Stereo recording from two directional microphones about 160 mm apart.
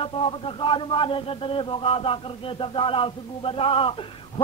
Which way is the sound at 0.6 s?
30° left (ahead or behind).